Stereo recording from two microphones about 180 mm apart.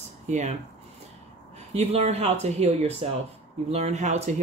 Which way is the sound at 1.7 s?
35° right (ahead or behind).